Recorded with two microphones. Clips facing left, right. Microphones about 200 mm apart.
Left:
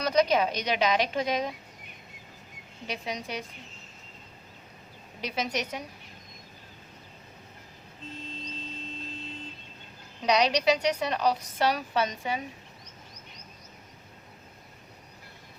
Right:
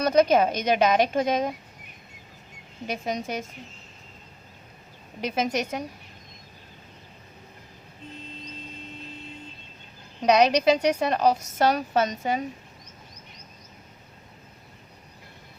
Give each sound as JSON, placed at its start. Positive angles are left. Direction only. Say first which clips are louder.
{"t": 0.0, "sound": "a woman's voice", "louder": "right 5 dB", "side_deg": -50}
{"t": 2.8, "sound": "a woman's voice", "louder": "right 5 dB", "side_deg": -45}
{"t": 5.2, "sound": "a woman's voice", "louder": "right 5 dB", "side_deg": -50}
{"t": 10.2, "sound": "a woman's voice", "louder": "right 5 dB", "side_deg": -50}